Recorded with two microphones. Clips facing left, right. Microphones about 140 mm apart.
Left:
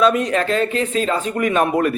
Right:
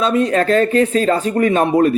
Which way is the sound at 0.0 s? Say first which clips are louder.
Right 1 dB; 30° right (ahead or behind).